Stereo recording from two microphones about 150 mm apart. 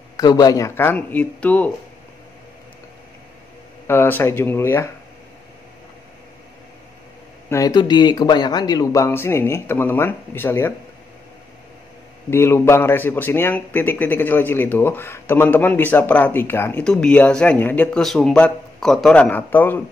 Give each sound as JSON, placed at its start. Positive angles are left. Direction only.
{"t": 0.2, "sound": "speech", "side_deg": 25}
{"t": 3.8, "sound": "speech", "side_deg": 15}
{"t": 7.4, "sound": "speech", "side_deg": 20}
{"t": 12.3, "sound": "speech", "side_deg": 15}